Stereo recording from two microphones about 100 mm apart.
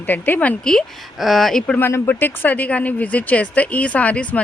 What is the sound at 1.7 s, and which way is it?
Speech, 25° left (ahead or behind).